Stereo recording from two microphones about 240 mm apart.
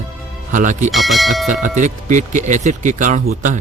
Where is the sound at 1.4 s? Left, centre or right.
Right.